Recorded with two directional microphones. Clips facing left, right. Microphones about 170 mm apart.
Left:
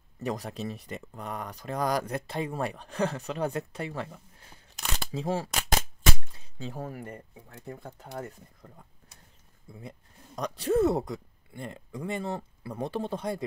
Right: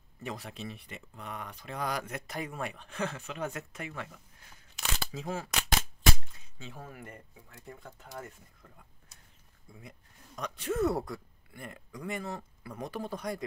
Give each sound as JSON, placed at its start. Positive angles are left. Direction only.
{"t": 0.2, "sound": "a woman's voice", "side_deg": 40}